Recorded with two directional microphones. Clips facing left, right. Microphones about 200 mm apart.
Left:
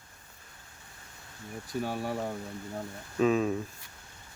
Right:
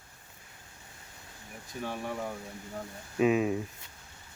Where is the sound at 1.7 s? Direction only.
35° left (ahead or behind).